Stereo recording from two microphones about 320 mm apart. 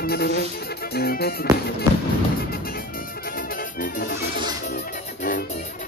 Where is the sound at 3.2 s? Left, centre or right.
Left.